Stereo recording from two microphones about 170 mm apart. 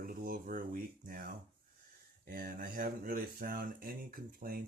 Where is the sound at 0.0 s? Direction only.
55° right (ahead or behind).